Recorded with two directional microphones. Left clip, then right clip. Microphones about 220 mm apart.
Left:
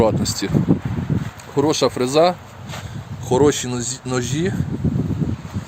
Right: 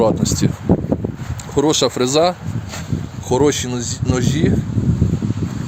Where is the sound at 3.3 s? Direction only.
5° right (ahead or behind).